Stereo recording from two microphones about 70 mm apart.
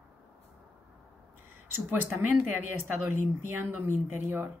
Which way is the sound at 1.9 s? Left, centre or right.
Right.